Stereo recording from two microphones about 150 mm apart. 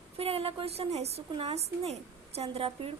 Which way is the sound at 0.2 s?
40° right (ahead or behind).